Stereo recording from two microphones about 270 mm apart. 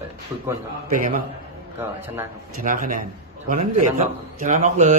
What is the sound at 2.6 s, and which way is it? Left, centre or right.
Speech, right.